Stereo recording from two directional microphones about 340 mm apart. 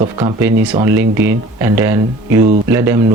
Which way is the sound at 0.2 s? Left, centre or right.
Centre.